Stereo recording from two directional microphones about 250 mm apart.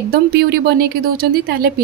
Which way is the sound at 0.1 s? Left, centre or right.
Right.